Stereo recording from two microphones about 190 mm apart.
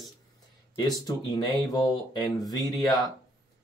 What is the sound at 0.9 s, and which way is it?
Speech, 20° left (ahead or behind).